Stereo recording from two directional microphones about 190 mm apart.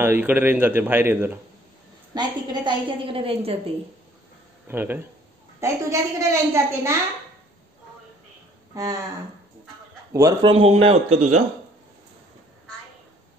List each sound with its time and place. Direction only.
0.0 s a man's voice: 10° right (ahead or behind)
2.1 s a woman's voice: 25° right (ahead or behind)
4.6 s a man's voice: 10° right (ahead or behind)
10.1 s a man's voice: 15° right (ahead or behind)
10.5 s speech: 30° right (ahead or behind)